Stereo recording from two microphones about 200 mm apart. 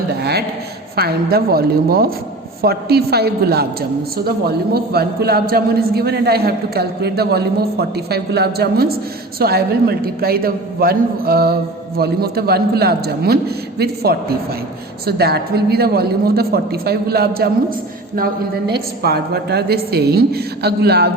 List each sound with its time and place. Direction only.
0.2 s a sound: 55° right (ahead or behind)
0.9 s a man's voice: 50° right (ahead or behind)
18.7 s a man's voice: 50° right (ahead or behind)